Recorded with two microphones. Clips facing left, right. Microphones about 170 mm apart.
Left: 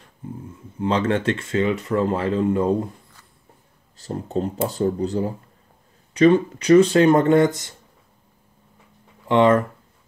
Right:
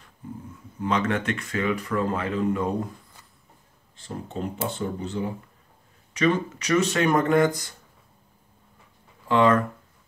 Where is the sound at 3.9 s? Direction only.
40° left (ahead or behind).